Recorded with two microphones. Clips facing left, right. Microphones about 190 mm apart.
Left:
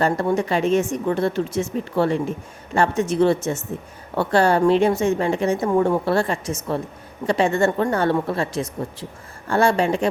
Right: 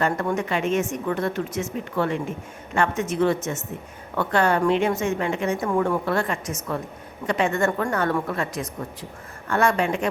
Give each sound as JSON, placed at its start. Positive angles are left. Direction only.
{"t": 0.0, "sound": "a woman's voice", "side_deg": 30}